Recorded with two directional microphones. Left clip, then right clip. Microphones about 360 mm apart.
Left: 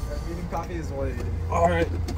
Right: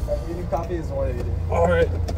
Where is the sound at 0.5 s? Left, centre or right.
Centre.